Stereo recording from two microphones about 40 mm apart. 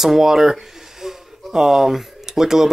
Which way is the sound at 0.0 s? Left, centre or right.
Centre.